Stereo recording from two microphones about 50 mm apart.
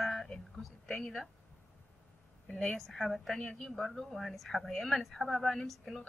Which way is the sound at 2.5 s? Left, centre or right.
Centre.